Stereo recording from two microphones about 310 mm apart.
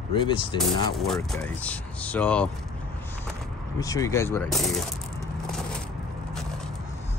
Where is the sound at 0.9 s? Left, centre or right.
Centre.